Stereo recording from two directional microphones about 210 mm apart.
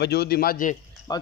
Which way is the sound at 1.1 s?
20° left (ahead or behind).